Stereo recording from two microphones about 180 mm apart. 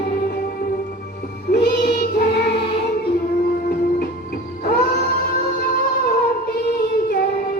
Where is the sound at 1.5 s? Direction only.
65° left (ahead or behind).